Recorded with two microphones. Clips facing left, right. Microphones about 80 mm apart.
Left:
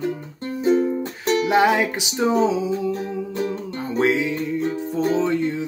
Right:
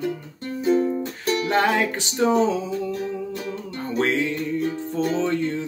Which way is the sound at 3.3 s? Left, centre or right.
Left.